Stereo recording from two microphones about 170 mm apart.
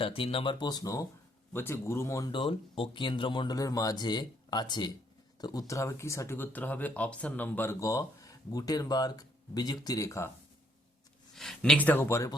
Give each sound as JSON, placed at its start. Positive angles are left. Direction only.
{"t": 0.0, "sound": "speech", "side_deg": 35}
{"t": 11.3, "sound": "speech", "side_deg": 5}